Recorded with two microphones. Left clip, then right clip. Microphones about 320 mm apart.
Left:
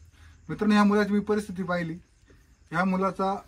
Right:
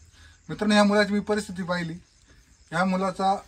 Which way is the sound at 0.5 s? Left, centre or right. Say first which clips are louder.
Right 3 dB; right.